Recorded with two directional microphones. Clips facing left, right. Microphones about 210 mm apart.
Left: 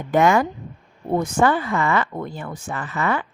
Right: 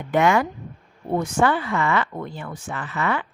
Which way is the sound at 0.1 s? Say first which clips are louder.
Left 2 dB; 40° left (ahead or behind).